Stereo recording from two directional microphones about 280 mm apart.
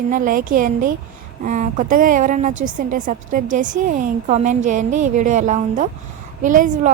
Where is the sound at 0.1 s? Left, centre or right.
Right.